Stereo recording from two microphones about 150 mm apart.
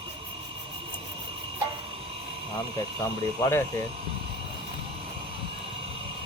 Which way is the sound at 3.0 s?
20° left (ahead or behind).